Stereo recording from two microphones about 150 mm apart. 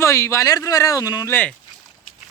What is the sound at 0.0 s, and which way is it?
Speech, 20° left (ahead or behind).